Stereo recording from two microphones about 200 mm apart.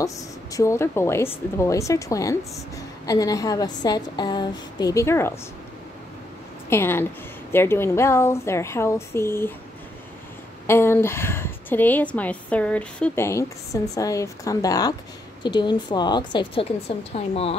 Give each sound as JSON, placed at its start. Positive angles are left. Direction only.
{"t": 0.0, "sound": "a woman's voice", "side_deg": 15}
{"t": 6.7, "sound": "a woman's voice", "side_deg": 10}
{"t": 10.7, "sound": "a woman's voice", "side_deg": 10}